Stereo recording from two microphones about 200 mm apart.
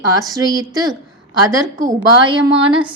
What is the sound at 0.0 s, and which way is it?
A woman's voice, 15° right (ahead or behind).